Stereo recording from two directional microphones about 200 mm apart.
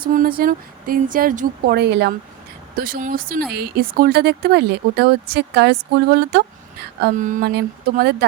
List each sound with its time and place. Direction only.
0.0 s speech: 45° right (ahead or behind)
2.7 s speech: 45° right (ahead or behind)